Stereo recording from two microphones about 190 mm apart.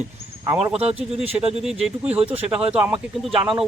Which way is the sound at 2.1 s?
30° right (ahead or behind).